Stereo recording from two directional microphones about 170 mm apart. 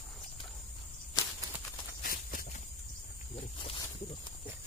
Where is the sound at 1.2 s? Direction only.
20° left (ahead or behind).